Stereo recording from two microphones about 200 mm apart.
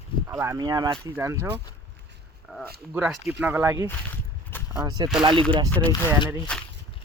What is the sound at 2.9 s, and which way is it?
Speech, 10° right (ahead or behind).